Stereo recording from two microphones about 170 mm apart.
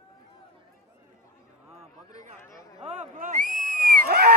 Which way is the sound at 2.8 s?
50° right (ahead or behind).